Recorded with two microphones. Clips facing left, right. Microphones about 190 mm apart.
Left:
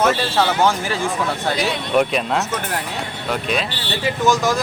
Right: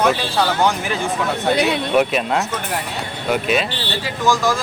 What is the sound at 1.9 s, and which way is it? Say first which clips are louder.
Speech: left 1 dB; 5° right (ahead or behind).